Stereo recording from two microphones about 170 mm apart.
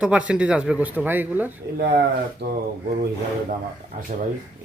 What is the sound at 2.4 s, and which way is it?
Speech, 75° right (ahead or behind).